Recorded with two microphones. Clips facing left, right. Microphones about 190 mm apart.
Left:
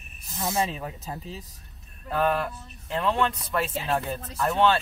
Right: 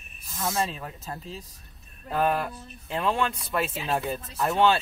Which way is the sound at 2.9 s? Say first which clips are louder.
Left 1 dB; 10° right (ahead or behind).